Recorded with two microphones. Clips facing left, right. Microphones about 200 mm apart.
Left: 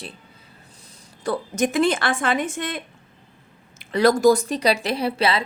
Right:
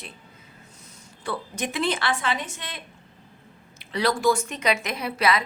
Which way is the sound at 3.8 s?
50° left (ahead or behind).